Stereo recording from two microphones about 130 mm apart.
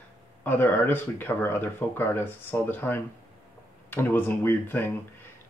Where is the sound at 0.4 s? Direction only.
15° left (ahead or behind).